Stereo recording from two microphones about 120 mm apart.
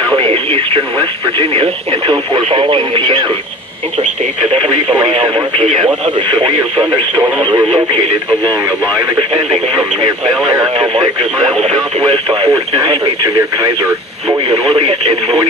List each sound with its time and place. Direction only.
0.1 s speech: 50° right (ahead or behind)
4.6 s speech: 35° right (ahead or behind)
6.9 s speech: 15° right (ahead or behind)
12.1 s speech: 45° right (ahead or behind)
13.3 s speech: 30° right (ahead or behind)
14.5 s speech: 50° right (ahead or behind)